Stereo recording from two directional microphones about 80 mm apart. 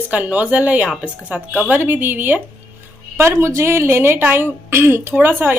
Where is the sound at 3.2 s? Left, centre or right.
Right.